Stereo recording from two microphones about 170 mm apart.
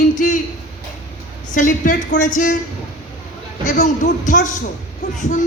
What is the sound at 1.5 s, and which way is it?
A man's voice, 50° left (ahead or behind).